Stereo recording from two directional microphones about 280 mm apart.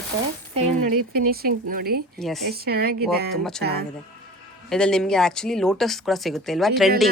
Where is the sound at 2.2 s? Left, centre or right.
Centre.